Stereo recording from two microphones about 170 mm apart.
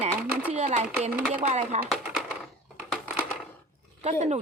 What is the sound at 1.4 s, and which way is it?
Speech, 40° right (ahead or behind).